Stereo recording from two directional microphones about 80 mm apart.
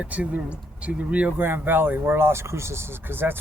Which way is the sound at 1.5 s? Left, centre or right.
Right.